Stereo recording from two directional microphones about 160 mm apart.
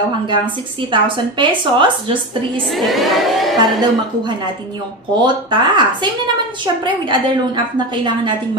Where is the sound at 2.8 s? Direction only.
Centre (ahead or behind).